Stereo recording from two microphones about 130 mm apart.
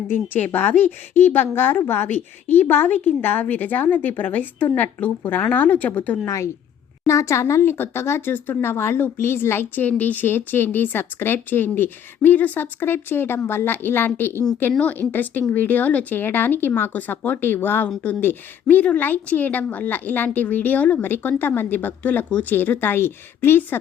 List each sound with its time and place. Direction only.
0.1 s speech: 15° left (ahead or behind)
6.2 s a woman's voice: 25° left (ahead or behind)